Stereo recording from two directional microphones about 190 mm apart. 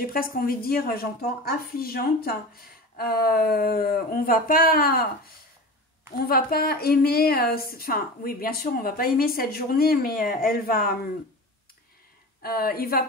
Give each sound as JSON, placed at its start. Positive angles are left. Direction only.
{"t": 0.0, "sound": "a woman's voice", "side_deg": 50}
{"t": 6.1, "sound": "a woman's voice", "side_deg": 50}
{"t": 12.4, "sound": "a woman's voice", "side_deg": 50}